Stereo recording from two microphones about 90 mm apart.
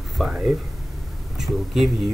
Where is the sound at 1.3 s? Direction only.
Centre (ahead or behind).